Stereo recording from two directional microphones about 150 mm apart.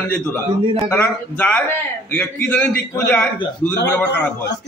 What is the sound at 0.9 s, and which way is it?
A man's voice, 10° left (ahead or behind).